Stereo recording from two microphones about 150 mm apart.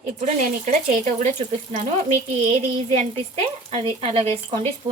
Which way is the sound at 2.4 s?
45° right (ahead or behind).